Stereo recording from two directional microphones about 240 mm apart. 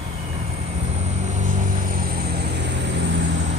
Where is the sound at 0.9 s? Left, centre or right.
Right.